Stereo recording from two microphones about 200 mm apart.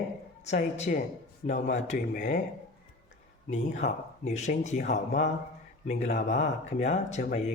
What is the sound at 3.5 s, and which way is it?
Speech, 35° left (ahead or behind).